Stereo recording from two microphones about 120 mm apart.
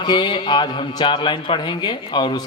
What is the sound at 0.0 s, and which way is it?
Mantra, 40° left (ahead or behind).